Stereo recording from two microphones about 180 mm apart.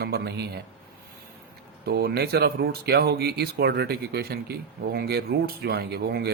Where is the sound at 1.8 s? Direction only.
60° right (ahead or behind).